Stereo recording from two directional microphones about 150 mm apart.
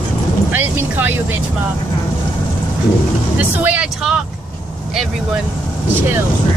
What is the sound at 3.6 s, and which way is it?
Speech, 10° right (ahead or behind).